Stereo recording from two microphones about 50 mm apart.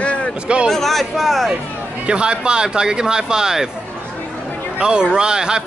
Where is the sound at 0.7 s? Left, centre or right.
Centre.